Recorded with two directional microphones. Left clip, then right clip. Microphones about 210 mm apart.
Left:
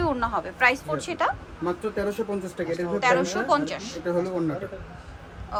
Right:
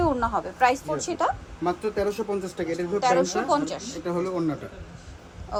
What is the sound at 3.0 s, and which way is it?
A woman's voice, 15° right (ahead or behind).